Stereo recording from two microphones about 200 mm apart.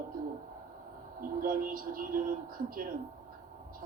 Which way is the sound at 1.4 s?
45° right (ahead or behind).